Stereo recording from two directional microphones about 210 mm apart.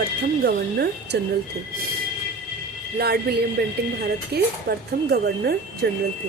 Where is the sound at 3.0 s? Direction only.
50° right (ahead or behind).